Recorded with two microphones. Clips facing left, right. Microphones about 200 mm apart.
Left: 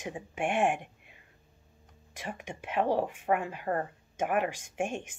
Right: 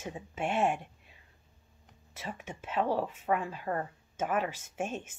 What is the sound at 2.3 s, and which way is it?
Speech, 15° left (ahead or behind).